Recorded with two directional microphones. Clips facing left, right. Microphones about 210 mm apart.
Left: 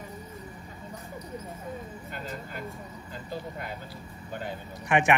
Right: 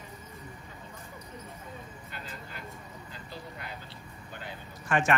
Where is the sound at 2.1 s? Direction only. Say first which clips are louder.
Left 6 dB; 45° left (ahead or behind).